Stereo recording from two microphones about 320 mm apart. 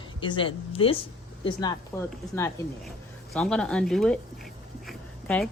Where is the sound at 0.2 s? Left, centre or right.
Centre.